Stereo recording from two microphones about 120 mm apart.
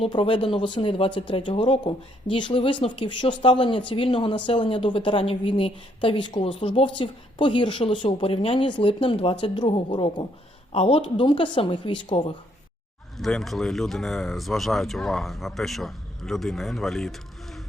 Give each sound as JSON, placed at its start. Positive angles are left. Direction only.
{"t": 0.0, "sound": "speech", "side_deg": 45}
{"t": 10.7, "sound": "speech", "side_deg": 55}
{"t": 13.1, "sound": "speech", "side_deg": 0}